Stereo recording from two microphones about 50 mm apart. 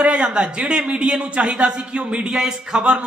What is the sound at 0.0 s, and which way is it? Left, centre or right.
Speech, right.